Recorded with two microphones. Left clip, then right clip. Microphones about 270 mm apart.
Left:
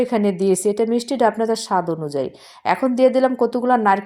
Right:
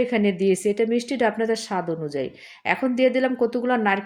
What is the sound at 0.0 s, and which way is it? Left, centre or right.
A woman's voice, centre.